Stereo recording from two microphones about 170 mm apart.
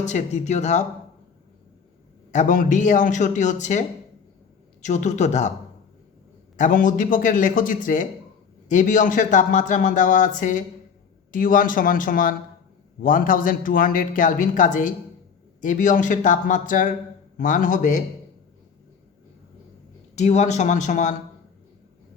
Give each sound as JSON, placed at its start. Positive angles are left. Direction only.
{"t": 0.0, "sound": "speech", "side_deg": 45}
{"t": 2.3, "sound": "speech", "side_deg": 50}
{"t": 6.6, "sound": "speech", "side_deg": 50}
{"t": 20.1, "sound": "speech", "side_deg": 40}